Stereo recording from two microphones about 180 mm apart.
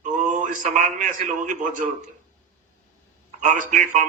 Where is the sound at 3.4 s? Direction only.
45° right (ahead or behind).